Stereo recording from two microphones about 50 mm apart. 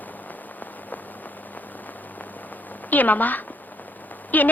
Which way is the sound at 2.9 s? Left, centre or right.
Left.